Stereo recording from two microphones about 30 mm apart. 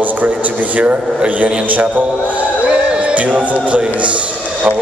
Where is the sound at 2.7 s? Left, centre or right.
Right.